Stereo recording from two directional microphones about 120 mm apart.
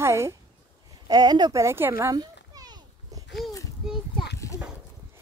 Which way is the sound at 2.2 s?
35° right (ahead or behind).